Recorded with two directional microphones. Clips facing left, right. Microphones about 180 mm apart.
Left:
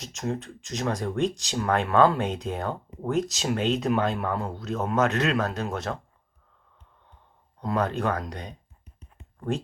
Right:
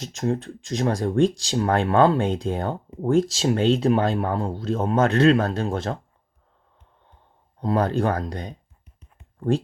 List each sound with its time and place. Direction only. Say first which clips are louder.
0.0 s speech: right 6 dB; 35° right (ahead or behind)
7.6 s speech: right 4 dB; 30° right (ahead or behind)